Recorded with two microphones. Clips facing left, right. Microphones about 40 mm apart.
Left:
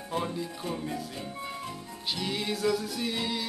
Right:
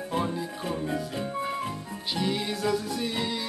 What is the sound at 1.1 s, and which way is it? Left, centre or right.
Music, right.